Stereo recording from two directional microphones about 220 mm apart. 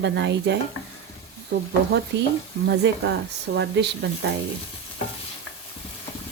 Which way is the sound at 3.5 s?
50° right (ahead or behind).